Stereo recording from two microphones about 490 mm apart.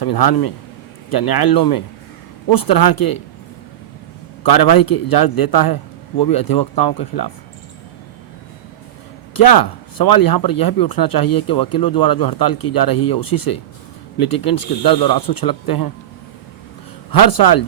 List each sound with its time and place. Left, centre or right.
0.0 s speech: left
4.4 s speech: left
9.3 s speech: left
17.1 s speech: left